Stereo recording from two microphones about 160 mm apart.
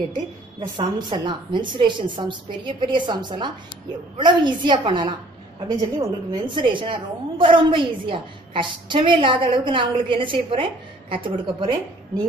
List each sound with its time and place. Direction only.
0.7 s a woman's voice: 30° right (ahead or behind)